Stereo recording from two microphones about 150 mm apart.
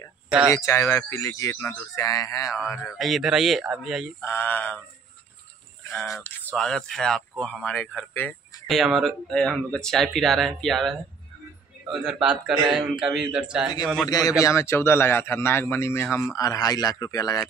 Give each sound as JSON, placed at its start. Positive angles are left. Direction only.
{"t": 0.3, "sound": "speech", "side_deg": -5}
{"t": 0.7, "sound": "a man's voice", "side_deg": 20}
{"t": 2.5, "sound": "speech", "side_deg": 0}
{"t": 4.2, "sound": "speech", "side_deg": 10}
{"t": 6.2, "sound": "speech", "side_deg": 5}
{"t": 8.6, "sound": "speech", "side_deg": 0}
{"t": 14.0, "sound": "a man's voice", "side_deg": 25}